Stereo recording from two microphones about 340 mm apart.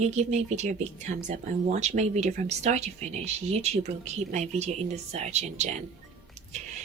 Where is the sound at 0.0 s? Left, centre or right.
Centre.